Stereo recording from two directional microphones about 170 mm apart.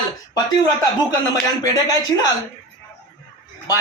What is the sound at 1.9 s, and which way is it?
Speech, 20° left (ahead or behind).